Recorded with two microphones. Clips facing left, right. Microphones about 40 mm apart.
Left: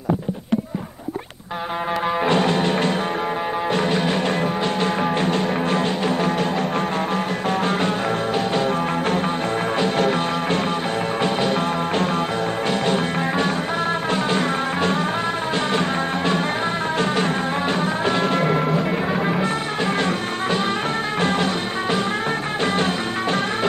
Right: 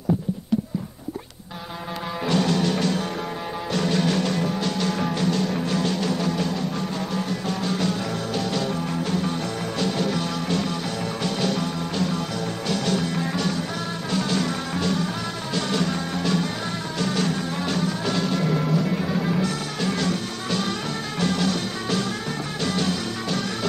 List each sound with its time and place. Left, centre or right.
2.2 s music: left
7.4 s music: left
9.9 s music: left
17.7 s music: left